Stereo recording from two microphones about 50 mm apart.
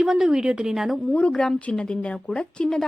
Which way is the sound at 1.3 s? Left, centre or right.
Centre.